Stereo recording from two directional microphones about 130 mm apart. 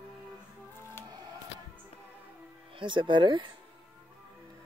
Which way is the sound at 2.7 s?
40° right (ahead or behind).